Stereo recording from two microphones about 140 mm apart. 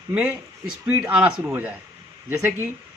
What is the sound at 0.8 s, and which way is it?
Speech, 10° right (ahead or behind).